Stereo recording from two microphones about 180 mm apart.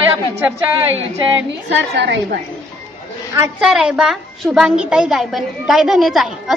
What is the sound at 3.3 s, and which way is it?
Speech, 15° right (ahead or behind).